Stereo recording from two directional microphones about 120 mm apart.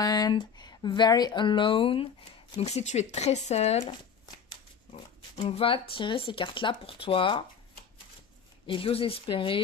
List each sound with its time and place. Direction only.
0.0 s speech: 35° left (ahead or behind)
2.5 s speech: 65° left (ahead or behind)
5.4 s speech: 50° left (ahead or behind)
8.6 s speech: 50° left (ahead or behind)